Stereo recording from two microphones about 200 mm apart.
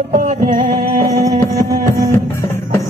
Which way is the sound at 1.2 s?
15° right (ahead or behind).